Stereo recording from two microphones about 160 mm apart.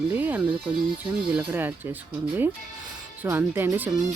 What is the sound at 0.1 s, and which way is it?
Speech, 10° right (ahead or behind).